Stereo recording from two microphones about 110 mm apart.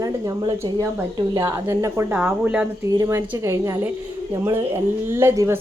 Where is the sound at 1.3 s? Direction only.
35° right (ahead or behind).